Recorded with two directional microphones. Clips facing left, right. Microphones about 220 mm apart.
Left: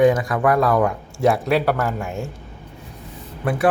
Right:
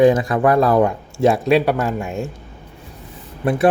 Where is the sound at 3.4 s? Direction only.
20° right (ahead or behind).